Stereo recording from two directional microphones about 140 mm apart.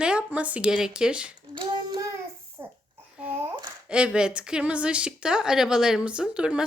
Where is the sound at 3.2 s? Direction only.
15° right (ahead or behind).